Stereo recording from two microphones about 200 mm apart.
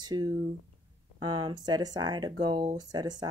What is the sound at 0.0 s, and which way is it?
Speech, 20° right (ahead or behind).